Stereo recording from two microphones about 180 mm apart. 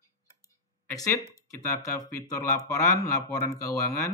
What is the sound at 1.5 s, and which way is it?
Speech, 20° left (ahead or behind).